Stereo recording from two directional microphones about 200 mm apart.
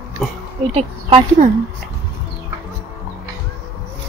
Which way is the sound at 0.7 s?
30° right (ahead or behind).